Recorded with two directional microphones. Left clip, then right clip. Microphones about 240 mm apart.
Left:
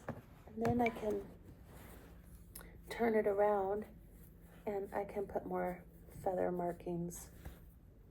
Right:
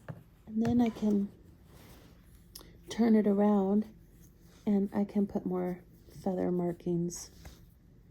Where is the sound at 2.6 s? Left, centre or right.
Right.